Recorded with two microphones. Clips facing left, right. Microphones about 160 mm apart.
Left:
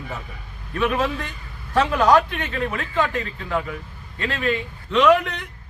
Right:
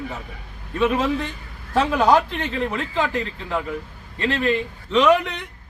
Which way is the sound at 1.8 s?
Centre (ahead or behind).